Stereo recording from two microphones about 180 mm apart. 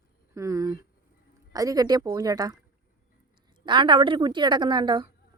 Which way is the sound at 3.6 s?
25° right (ahead or behind).